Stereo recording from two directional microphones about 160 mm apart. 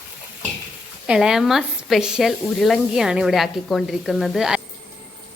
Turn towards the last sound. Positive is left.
turn(degrees=-5)  # may be behind; listen again after turning